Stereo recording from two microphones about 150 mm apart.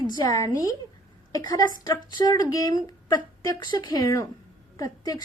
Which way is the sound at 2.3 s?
25° left (ahead or behind).